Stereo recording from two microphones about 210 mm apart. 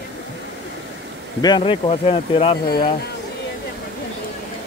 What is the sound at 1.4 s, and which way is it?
Speech, 20° left (ahead or behind).